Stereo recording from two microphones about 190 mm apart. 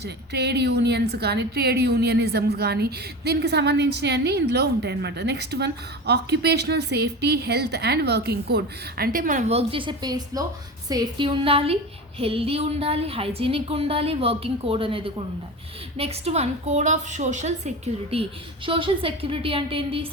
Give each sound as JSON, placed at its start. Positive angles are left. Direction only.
{"t": 0.0, "sound": "a woman's voice", "side_deg": -60}